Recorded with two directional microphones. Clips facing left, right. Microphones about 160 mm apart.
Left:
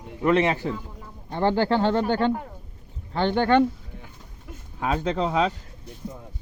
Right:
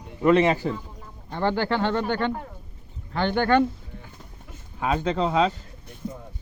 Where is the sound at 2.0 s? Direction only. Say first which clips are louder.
Left 3 dB; 35° left (ahead or behind).